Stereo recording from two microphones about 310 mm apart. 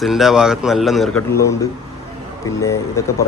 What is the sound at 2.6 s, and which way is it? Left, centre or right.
Speech, centre.